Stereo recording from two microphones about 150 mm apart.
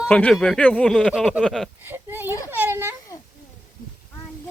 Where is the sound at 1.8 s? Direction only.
15° right (ahead or behind).